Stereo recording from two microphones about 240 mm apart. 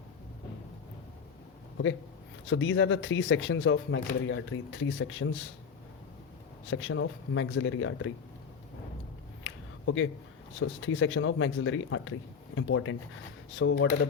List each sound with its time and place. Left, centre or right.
2.5 s speech: left
6.7 s speech: left
9.4 s a sound: left
10.6 s speech: left
13.6 s speech: left